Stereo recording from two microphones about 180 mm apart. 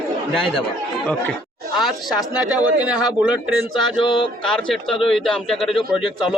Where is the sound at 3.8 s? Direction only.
25° left (ahead or behind).